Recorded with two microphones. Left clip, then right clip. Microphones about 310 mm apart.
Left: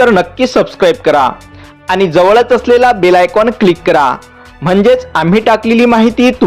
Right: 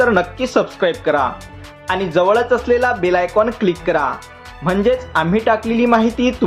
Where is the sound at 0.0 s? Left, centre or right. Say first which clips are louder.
Left 7 dB; left.